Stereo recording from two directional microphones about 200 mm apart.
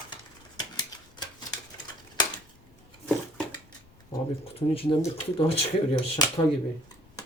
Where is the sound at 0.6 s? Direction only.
20° left (ahead or behind).